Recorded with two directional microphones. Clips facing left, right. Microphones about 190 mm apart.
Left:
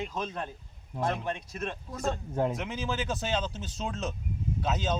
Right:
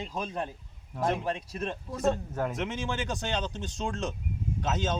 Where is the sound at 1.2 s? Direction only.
30° right (ahead or behind).